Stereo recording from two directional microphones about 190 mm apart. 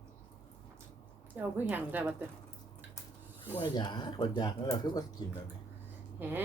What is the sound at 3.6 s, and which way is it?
Speech, 20° left (ahead or behind).